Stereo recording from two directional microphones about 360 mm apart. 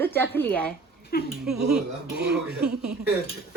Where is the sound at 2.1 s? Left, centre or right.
Right.